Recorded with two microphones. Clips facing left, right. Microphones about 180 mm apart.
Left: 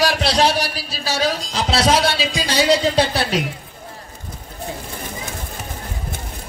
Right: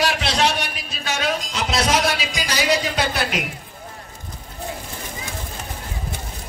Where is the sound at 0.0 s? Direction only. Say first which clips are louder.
Left 3 dB; 35° left (ahead or behind).